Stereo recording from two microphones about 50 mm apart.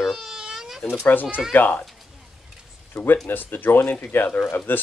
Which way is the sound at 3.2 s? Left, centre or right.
Left.